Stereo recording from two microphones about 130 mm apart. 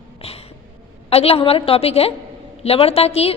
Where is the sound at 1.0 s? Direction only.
50° left (ahead or behind).